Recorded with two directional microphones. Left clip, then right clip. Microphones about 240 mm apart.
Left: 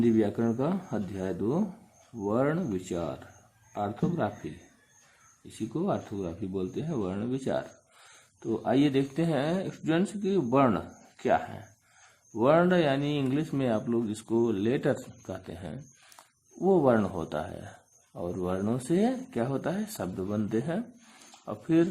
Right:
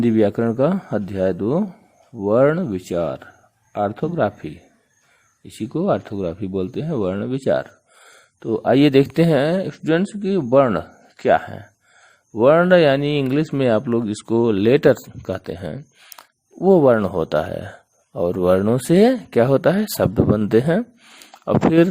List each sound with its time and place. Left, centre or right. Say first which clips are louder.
0.0 s speech: right 9 dB; right
5.5 s speech: right 11 dB; right